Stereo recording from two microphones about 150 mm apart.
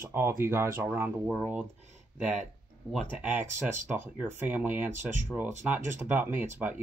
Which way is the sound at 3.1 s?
10° right (ahead or behind).